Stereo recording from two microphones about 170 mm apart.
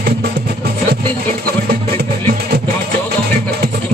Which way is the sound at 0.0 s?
70° right (ahead or behind).